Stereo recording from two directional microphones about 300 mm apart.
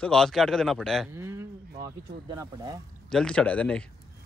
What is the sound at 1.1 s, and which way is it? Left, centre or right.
Speech, centre.